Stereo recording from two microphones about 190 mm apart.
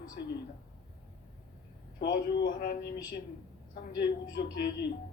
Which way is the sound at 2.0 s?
50° left (ahead or behind).